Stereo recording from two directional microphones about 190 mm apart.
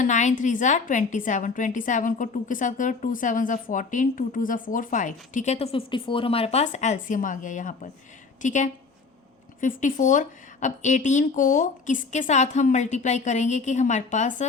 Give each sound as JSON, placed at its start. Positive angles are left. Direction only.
{"t": 0.0, "sound": "a woman's voice", "side_deg": 40}